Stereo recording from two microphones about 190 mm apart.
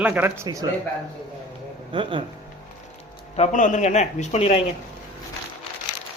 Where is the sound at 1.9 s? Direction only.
25° right (ahead or behind).